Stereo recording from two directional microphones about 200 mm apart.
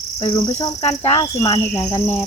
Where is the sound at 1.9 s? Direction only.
30° left (ahead or behind).